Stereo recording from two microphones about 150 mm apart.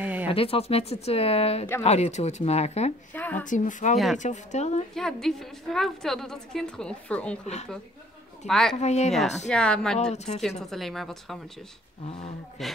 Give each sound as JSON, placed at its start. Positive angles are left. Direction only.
{"t": 0.0, "sound": "a sound", "side_deg": -10}
{"t": 0.3, "sound": "speech", "side_deg": 40}
{"t": 3.1, "sound": "a woman's voice", "side_deg": 10}
{"t": 3.4, "sound": "speech", "side_deg": 55}
{"t": 4.9, "sound": "a woman's voice", "side_deg": 5}
{"t": 8.5, "sound": "a woman's voice", "side_deg": 0}
{"t": 8.7, "sound": "speech", "side_deg": 45}
{"t": 9.5, "sound": "a woman's voice", "side_deg": 5}
{"t": 10.1, "sound": "speech", "side_deg": 50}
{"t": 10.7, "sound": "a woman's voice", "side_deg": 0}
{"t": 12.1, "sound": "speech", "side_deg": 50}
{"t": 12.6, "sound": "a woman's voice", "side_deg": 0}